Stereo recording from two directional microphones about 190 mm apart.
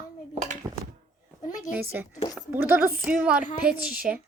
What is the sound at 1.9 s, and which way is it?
A woman's voice, 10° right (ahead or behind).